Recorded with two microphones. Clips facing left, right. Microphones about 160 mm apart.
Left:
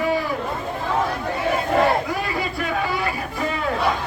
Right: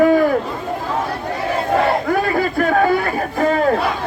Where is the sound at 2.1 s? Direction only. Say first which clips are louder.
Right 8 dB; 55° right (ahead or behind).